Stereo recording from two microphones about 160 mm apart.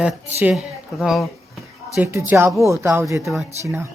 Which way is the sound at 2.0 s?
15° right (ahead or behind).